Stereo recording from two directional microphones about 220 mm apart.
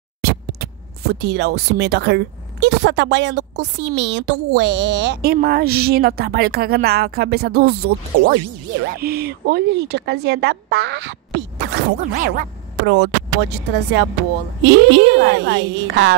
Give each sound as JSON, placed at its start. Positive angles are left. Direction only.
{"t": 0.2, "sound": "speech", "side_deg": -45}
{"t": 8.9, "sound": "speech", "side_deg": -45}
{"t": 11.5, "sound": "a sound", "side_deg": -40}
{"t": 12.4, "sound": "speech", "side_deg": -50}